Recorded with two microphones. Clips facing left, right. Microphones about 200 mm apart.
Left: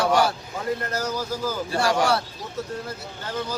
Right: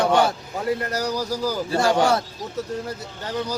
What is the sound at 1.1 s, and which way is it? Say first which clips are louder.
Speech: right 3 dB; 40° right (ahead or behind).